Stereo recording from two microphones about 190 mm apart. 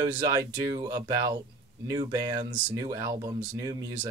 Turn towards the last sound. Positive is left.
turn(degrees=-20)  # may be behind; listen again after turning